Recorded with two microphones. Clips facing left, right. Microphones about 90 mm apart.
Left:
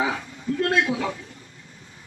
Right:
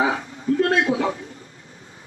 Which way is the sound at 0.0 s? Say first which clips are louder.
Right 4 dB; 30° right (ahead or behind).